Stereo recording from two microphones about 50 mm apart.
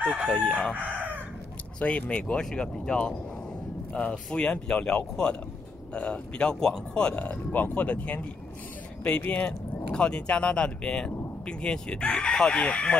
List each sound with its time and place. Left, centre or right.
0.0 s chicken: right
0.3 s speech: left
0.7 s chicken: right
1.8 s speech: left
9.3 s speech: left